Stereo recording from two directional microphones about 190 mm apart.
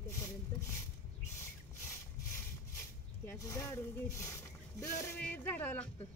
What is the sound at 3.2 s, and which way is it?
Speech, 15° left (ahead or behind).